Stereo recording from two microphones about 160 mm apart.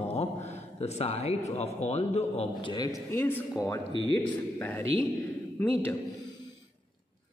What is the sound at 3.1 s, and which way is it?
Speech, 10° left (ahead or behind).